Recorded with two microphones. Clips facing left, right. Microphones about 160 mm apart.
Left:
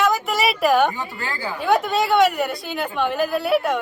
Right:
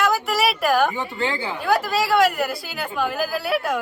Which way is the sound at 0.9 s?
20° right (ahead or behind).